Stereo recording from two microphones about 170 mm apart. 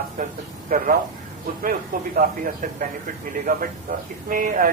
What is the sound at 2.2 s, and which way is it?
Speech, 55° right (ahead or behind).